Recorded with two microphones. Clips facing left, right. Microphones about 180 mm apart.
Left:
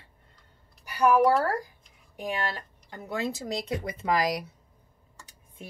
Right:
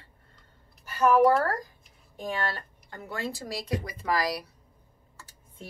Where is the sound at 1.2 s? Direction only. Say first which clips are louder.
Right 3 dB; centre (ahead or behind).